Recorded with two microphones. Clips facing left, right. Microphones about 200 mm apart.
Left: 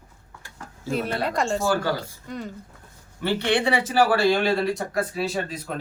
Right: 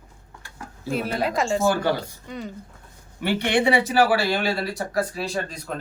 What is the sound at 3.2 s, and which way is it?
Speech, 15° right (ahead or behind).